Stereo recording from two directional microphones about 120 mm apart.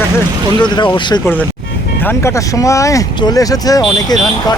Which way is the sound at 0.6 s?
40° left (ahead or behind).